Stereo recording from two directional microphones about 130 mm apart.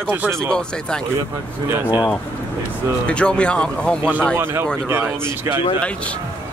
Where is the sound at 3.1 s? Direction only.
10° left (ahead or behind).